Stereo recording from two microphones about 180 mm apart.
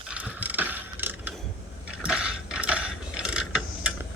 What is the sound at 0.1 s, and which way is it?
Mechanisms, 10° right (ahead or behind).